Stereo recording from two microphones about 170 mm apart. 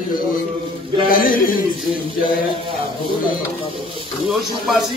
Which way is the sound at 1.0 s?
55° left (ahead or behind).